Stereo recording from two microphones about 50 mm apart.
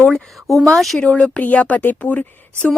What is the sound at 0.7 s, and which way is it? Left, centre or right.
Speech, centre.